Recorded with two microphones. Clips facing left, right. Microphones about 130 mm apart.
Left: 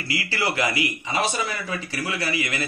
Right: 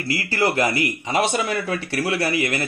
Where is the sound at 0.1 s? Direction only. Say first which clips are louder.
Right 5 dB; 45° right (ahead or behind).